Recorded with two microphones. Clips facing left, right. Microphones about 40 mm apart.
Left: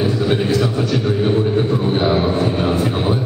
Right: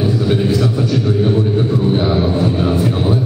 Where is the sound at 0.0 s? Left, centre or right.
Centre.